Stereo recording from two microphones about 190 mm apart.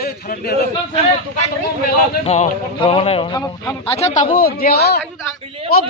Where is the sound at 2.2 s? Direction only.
35° left (ahead or behind); by 5.9 s 55° left (ahead or behind).